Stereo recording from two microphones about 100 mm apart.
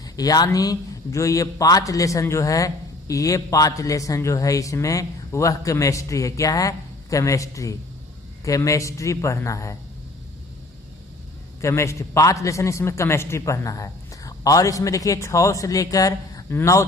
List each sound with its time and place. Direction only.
0.0 s a man's voice: 40° left (ahead or behind)
11.6 s a man's voice: 30° left (ahead or behind)